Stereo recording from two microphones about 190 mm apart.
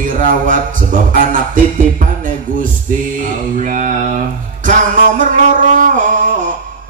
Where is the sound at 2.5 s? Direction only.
45° right (ahead or behind).